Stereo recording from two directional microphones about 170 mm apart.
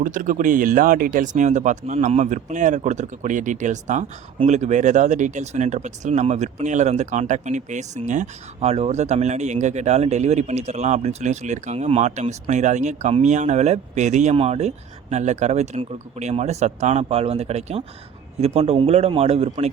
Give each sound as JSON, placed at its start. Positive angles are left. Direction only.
{"t": 0.0, "sound": "speech", "side_deg": -50}